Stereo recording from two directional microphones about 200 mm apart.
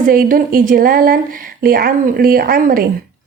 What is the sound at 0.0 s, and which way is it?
A woman's voice, 45° right (ahead or behind).